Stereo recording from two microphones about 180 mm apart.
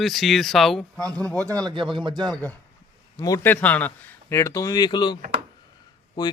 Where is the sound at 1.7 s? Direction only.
25° right (ahead or behind).